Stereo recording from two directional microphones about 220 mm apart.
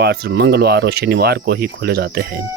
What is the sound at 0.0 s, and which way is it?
Speech, 50° right (ahead or behind).